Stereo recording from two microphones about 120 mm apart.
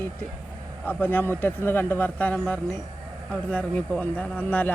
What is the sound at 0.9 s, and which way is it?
Speech, 15° left (ahead or behind).